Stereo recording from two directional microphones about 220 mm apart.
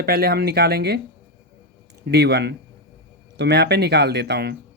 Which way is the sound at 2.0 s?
50° right (ahead or behind).